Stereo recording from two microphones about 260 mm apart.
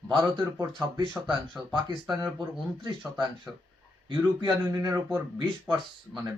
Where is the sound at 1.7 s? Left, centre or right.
Centre.